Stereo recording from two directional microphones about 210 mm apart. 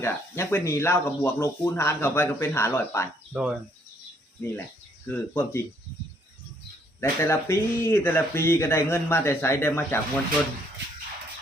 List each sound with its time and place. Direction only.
0.0 s speech: 10° left (ahead or behind)
3.3 s cricket: 5° right (ahead or behind)
5.0 s speech: 10° left (ahead or behind)
7.0 s speech: 10° left (ahead or behind)